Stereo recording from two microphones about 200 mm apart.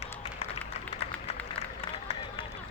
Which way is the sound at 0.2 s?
30° left (ahead or behind).